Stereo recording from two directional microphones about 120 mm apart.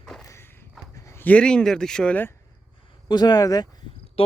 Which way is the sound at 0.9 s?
25° left (ahead or behind).